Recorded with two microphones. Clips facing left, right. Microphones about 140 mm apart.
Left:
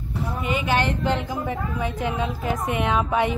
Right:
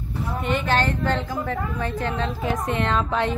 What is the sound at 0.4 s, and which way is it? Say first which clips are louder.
Speech: right 1 dB; 5° left (ahead or behind).